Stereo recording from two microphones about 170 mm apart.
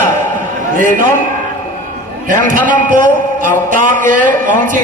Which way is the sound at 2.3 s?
55° right (ahead or behind).